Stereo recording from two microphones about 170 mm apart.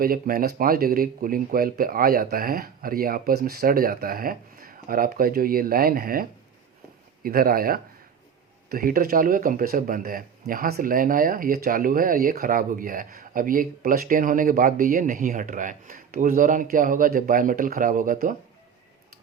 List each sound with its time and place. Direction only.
0.0 s speech: 60° right (ahead or behind)